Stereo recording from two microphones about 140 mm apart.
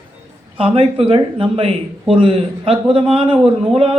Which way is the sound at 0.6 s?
40° right (ahead or behind).